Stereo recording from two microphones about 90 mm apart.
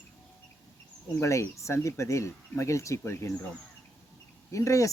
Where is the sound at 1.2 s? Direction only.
35° left (ahead or behind).